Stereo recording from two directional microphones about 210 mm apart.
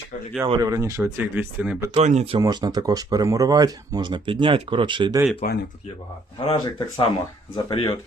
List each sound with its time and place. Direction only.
0.4 s speech: 15° right (ahead or behind)
1.9 s speech: 30° right (ahead or behind)
2.4 s speech: 20° right (ahead or behind)
5.4 s speech: 40° left (ahead or behind)
6.4 s speech: 20° left (ahead or behind)